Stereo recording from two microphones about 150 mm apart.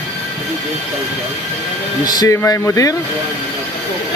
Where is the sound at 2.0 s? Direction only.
25° left (ahead or behind).